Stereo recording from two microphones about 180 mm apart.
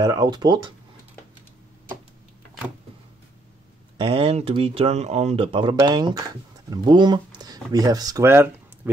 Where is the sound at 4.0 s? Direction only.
30° right (ahead or behind); by 8.9 s 15° right (ahead or behind).